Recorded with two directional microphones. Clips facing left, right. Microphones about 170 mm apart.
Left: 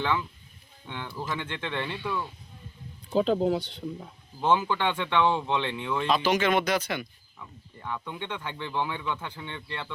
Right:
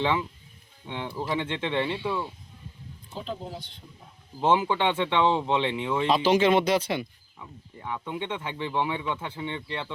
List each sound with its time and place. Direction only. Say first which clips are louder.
0.0 s speech: right 2 dB; 25° right (ahead or behind)
3.1 s speech: left 12 dB; 90° left; by 3.8 s 75° left (ahead or behind)
4.4 s speech: right 2 dB; 25° right (ahead or behind)
7.3 s speech: right 2 dB; 15° right (ahead or behind)